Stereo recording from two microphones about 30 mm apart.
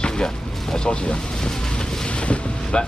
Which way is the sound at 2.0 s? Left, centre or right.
Left.